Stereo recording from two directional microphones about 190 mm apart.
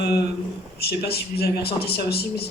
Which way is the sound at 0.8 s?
55° left (ahead or behind).